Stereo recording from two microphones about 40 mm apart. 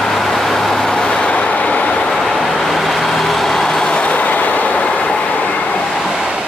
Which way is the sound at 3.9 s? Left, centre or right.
Left.